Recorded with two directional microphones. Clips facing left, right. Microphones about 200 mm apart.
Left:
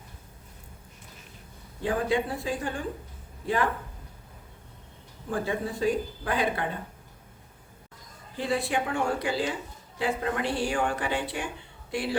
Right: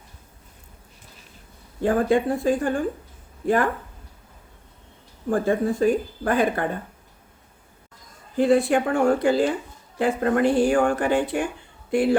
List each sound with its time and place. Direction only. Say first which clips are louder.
1.8 s speech: right 7 dB; 50° right (ahead or behind)
5.3 s speech: right 8 dB; 50° right (ahead or behind)
8.4 s speech: right 10 dB; 50° right (ahead or behind)